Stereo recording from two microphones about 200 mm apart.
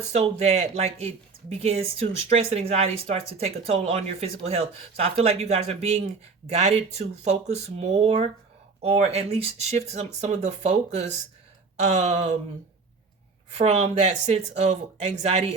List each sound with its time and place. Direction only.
0.1 s speech: 30° right (ahead or behind)
13.6 s speech: 35° right (ahead or behind)